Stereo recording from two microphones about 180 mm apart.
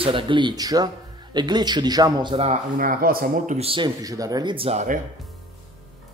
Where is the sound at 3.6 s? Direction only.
30° right (ahead or behind).